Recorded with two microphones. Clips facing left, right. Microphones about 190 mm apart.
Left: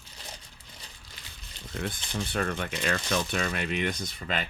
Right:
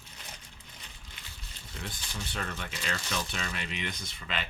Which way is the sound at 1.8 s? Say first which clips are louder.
Left 8 dB; 50° left (ahead or behind).